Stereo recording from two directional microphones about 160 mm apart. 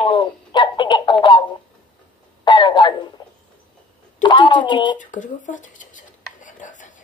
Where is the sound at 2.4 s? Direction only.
30° left (ahead or behind).